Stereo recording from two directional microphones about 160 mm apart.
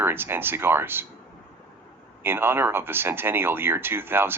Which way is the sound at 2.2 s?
15° right (ahead or behind).